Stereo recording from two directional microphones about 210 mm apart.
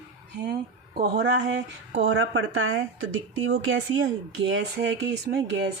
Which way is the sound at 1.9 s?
65° right (ahead or behind).